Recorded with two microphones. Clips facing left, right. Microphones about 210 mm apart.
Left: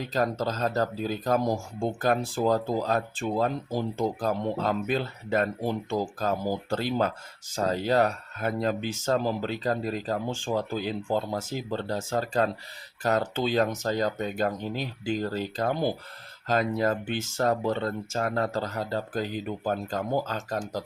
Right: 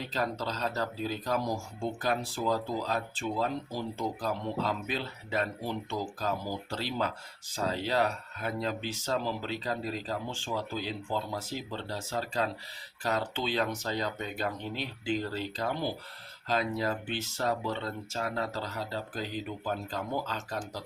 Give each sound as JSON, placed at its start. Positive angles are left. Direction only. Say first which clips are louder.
{"t": 0.1, "sound": "speech", "louder": "left 7 dB", "side_deg": 45}